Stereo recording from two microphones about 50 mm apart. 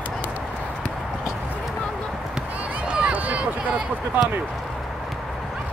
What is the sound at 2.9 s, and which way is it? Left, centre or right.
Run, centre.